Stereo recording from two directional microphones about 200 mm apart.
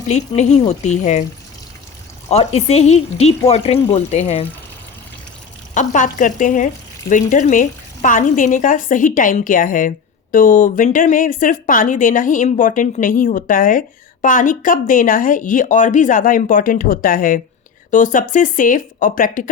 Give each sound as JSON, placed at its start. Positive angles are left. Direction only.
{"t": 0.1, "sound": "speech", "side_deg": 35}
{"t": 2.3, "sound": "speech", "side_deg": 30}
{"t": 5.7, "sound": "speech", "side_deg": 40}